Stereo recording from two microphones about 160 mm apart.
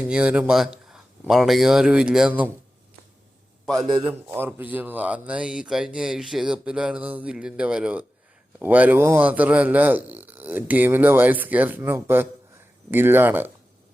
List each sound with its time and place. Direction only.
0.1 s speech: 5° right (ahead or behind)
3.8 s a man's voice: 30° right (ahead or behind)
4.1 s speech: 10° right (ahead or behind)